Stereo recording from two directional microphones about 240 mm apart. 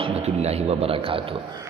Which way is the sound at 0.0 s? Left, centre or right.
Right.